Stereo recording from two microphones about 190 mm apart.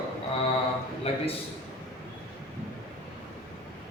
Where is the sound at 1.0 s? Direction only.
30° left (ahead or behind).